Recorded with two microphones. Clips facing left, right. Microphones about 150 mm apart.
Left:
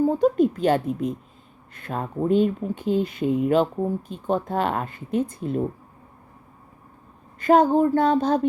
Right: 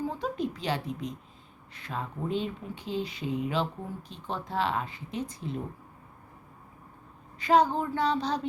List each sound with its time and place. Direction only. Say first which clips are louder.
0.0 s a woman's voice: left 13 dB; 45° left (ahead or behind)
7.3 s speech: left 7 dB; 50° left (ahead or behind)